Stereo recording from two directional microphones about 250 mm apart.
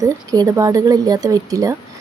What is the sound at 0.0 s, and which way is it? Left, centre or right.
Speech, centre.